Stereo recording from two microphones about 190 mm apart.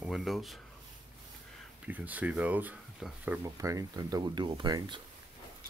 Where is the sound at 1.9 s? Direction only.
10° right (ahead or behind).